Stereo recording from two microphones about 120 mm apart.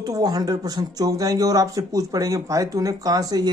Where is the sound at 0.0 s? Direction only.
30° right (ahead or behind).